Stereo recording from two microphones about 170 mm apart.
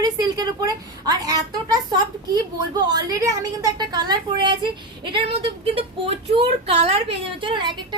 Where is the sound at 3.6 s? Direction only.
25° right (ahead or behind).